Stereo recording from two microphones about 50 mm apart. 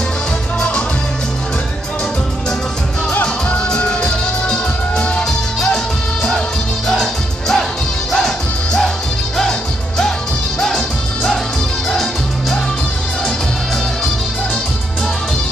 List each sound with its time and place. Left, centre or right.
3.1 s music: left
3.5 s music: centre
6.9 s music: centre
9.4 s music: centre
11.9 s music: centre